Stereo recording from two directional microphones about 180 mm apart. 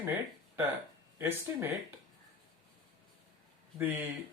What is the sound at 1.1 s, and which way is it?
Speech, 10° right (ahead or behind).